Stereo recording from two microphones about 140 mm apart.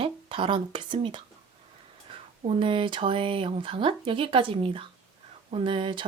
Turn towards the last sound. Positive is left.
turn(degrees=-35)  # may be behind; listen again after turning